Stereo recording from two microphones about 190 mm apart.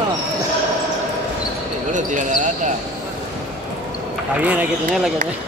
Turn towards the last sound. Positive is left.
turn(degrees=-10)  # may be behind; listen again after turning